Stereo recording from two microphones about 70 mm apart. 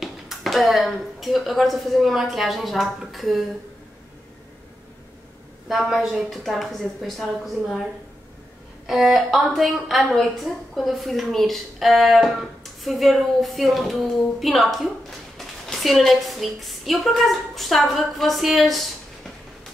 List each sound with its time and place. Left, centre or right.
0.0 s a woman's voice: centre
5.7 s a woman's voice: centre
8.8 s a woman's voice: centre